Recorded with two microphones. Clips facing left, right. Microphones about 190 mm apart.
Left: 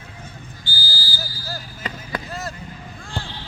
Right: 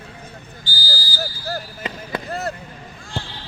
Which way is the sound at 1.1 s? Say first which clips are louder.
Right 9 dB; 60° right (ahead or behind).